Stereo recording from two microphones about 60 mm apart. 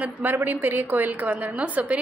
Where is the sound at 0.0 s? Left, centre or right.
Right.